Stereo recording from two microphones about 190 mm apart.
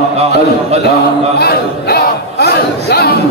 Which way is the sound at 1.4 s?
55° left (ahead or behind).